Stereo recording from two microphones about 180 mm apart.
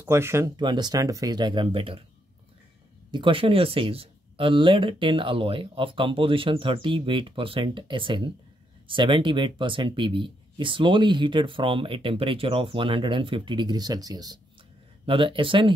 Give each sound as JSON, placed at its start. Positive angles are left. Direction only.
{"t": 0.0, "sound": "speech", "side_deg": -15}
{"t": 3.1, "sound": "speech", "side_deg": -30}